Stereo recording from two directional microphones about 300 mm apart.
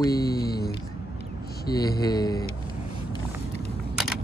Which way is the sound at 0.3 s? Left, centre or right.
Left.